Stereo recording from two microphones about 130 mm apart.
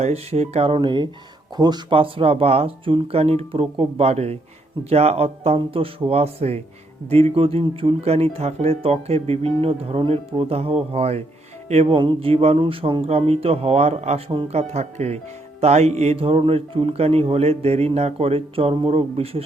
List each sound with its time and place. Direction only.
0.0 s speech: 55° right (ahead or behind)
11.9 s speech: 45° right (ahead or behind)